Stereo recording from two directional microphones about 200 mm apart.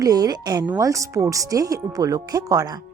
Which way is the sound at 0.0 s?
20° right (ahead or behind).